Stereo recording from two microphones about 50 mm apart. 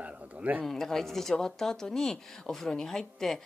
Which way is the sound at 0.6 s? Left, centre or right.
Centre.